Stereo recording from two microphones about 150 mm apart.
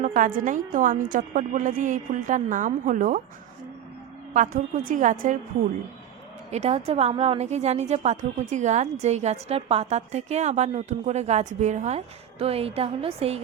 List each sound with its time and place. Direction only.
0.0 s a woman's voice: 60° right (ahead or behind)
4.9 s a woman's voice: 60° right (ahead or behind)
6.5 s a woman's voice: 45° right (ahead or behind)